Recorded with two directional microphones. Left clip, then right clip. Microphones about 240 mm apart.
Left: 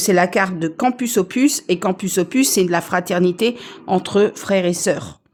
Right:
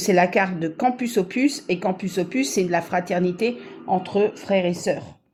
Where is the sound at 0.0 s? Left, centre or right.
Centre.